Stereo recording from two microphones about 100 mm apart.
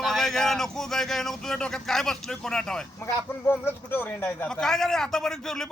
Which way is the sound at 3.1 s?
20° left (ahead or behind).